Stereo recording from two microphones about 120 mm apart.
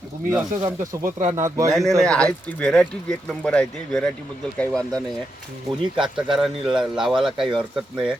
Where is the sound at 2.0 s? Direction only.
5° left (ahead or behind).